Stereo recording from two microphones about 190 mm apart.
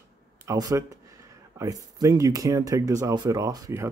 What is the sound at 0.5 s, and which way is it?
Speech, 15° right (ahead or behind).